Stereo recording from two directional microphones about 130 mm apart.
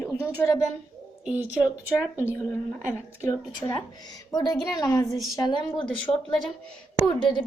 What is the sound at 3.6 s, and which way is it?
A woman's voice, 35° left (ahead or behind).